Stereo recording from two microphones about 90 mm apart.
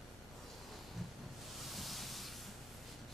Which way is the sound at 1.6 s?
Centre (ahead or behind).